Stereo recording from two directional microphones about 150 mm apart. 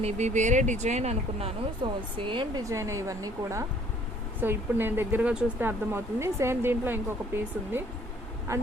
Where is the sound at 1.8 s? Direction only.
35° right (ahead or behind).